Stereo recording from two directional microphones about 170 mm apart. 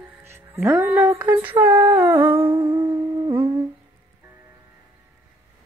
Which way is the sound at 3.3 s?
30° right (ahead or behind).